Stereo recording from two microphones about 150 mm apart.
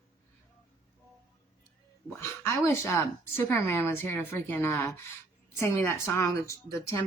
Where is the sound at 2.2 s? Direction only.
20° left (ahead or behind).